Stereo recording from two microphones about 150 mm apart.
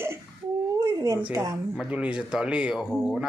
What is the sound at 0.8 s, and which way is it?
Dog, 20° right (ahead or behind).